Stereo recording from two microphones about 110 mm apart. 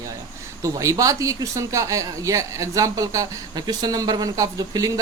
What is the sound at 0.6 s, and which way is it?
Speech, 30° right (ahead or behind).